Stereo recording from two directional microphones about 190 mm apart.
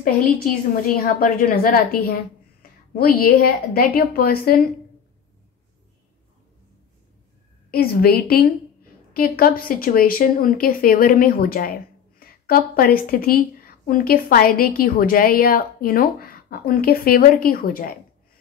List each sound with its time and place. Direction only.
0.0 s speech: 50° left (ahead or behind)
2.6 s a sound: 50° left (ahead or behind)
3.0 s speech: 50° left (ahead or behind)
7.7 s speech: 55° left (ahead or behind)